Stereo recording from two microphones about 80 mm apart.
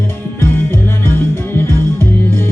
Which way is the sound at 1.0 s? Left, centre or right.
Left.